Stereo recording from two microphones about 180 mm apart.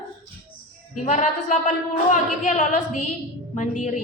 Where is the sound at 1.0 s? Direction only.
40° left (ahead or behind).